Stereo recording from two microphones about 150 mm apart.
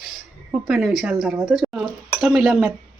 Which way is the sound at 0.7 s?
Centre (ahead or behind).